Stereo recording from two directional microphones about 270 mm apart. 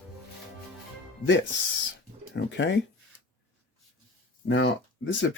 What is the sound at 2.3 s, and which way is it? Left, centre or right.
Speech, left.